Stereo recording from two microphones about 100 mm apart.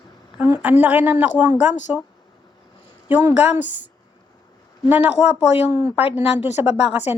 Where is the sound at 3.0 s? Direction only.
15° right (ahead or behind).